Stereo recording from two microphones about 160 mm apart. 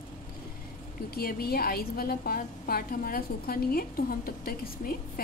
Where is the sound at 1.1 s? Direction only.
70° left (ahead or behind).